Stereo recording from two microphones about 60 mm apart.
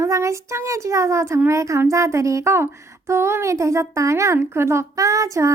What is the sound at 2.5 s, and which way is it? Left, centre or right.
A woman's voice, right.